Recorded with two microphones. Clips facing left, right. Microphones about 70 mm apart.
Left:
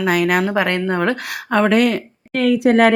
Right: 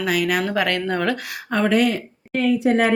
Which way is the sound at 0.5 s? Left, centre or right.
Left.